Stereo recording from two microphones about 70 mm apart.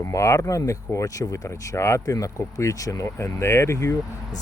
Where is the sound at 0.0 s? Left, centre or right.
Left.